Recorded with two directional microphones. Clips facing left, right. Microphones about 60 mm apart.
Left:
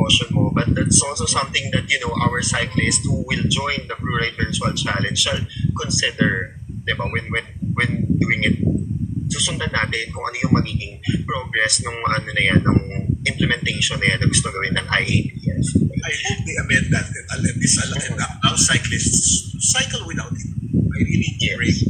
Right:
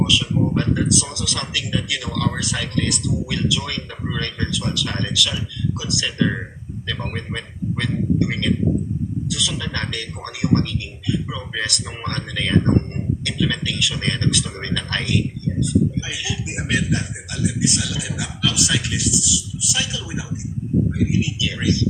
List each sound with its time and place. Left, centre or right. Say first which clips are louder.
0.1 s a man's voice: even; left
21.1 s a man's voice: left 1 dB; left